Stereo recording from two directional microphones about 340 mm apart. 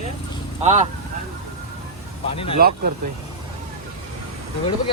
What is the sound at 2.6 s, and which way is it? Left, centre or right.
Speech, right.